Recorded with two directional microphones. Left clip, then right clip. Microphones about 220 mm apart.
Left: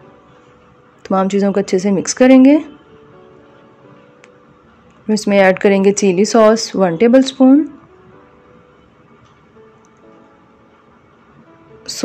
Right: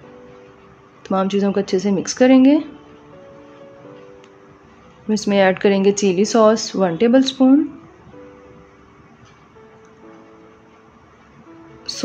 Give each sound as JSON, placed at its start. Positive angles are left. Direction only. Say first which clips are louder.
{"t": 1.0, "sound": "a woman's voice", "louder": "left 4 dB", "side_deg": 25}
{"t": 5.0, "sound": "a woman's voice", "louder": "left 4 dB", "side_deg": 25}
{"t": 11.9, "sound": "music", "louder": "left 1 dB", "side_deg": 25}